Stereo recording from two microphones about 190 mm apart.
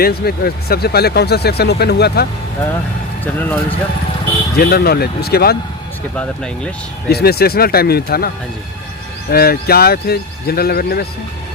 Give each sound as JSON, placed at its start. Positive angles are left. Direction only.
{"t": 0.0, "sound": "speech", "side_deg": 55}
{"t": 3.3, "sound": "speech", "side_deg": 10}
{"t": 4.5, "sound": "speech", "side_deg": 55}
{"t": 6.1, "sound": "speech", "side_deg": 5}
{"t": 7.1, "sound": "speech", "side_deg": 55}
{"t": 9.3, "sound": "speech", "side_deg": 55}